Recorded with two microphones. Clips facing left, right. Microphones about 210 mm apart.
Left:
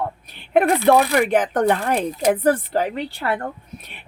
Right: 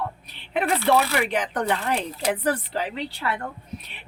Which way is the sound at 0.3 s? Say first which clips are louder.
Left 9 dB; 50° left (ahead or behind).